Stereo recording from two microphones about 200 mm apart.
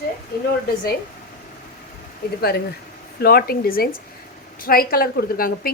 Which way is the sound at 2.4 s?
55° left (ahead or behind).